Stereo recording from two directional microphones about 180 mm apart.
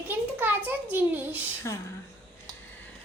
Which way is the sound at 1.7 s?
15° left (ahead or behind).